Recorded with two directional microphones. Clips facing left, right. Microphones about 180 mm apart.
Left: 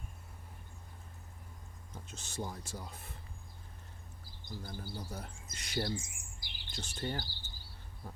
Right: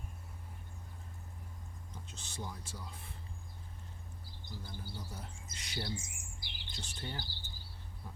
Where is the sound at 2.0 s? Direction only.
45° left (ahead or behind).